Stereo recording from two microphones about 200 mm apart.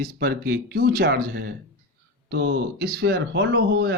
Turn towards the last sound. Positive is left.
turn(degrees=-60)  # may be behind; listen again after turning